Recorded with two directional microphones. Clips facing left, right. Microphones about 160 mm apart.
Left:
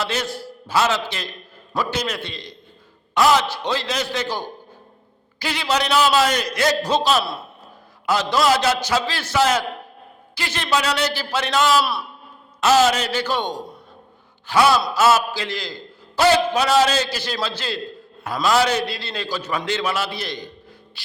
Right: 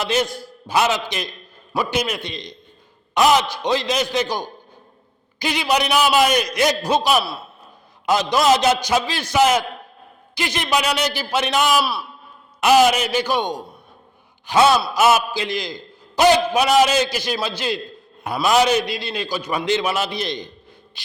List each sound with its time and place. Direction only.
0.0 s a man's voice: 15° right (ahead or behind)
11.8 s a man's voice: centre (ahead or behind)
12.5 s a man's voice: 15° right (ahead or behind)
14.4 s a sound: 20° right (ahead or behind)
14.9 s a man's voice: 15° right (ahead or behind)